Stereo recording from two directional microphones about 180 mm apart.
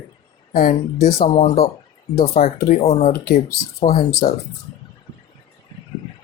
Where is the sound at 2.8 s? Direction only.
35° left (ahead or behind).